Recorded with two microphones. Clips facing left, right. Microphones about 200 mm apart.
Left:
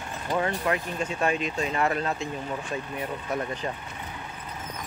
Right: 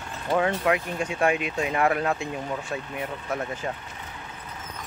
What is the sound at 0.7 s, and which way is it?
Speech, 10° right (ahead or behind).